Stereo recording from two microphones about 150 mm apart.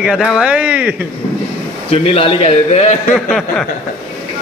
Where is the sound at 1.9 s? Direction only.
40° left (ahead or behind).